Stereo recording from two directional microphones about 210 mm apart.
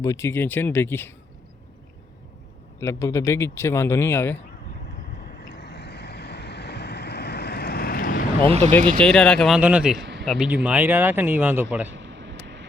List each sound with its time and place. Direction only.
0.0 s speech: 15° left (ahead or behind)
2.8 s speech: 15° left (ahead or behind)
5.2 s vehicle: 50° left (ahead or behind)
8.4 s speech: 30° right (ahead or behind)
9.0 s speech: 5° left (ahead or behind)
10.0 s a sound: 55° right (ahead or behind)
10.2 s speech: 5° right (ahead or behind)
11.9 s a sound: 60° right (ahead or behind)